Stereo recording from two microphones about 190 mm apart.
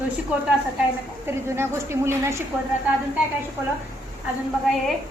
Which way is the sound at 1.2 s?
15° right (ahead or behind).